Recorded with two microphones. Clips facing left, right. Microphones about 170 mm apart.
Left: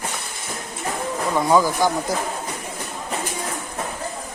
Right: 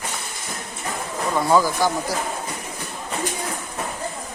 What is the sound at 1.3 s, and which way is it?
Speech, 15° left (ahead or behind).